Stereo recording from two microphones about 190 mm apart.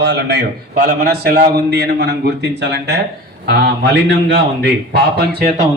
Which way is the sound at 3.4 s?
60° right (ahead or behind).